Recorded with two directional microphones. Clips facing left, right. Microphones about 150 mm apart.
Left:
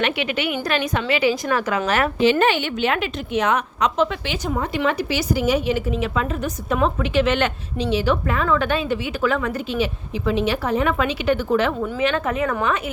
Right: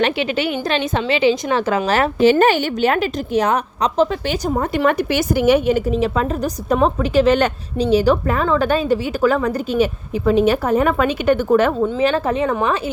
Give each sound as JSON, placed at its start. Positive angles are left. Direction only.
{"t": 0.0, "sound": "a woman's voice", "side_deg": -30}
{"t": 2.2, "sound": "a woman's voice", "side_deg": -40}
{"t": 11.9, "sound": "a woman's voice", "side_deg": -35}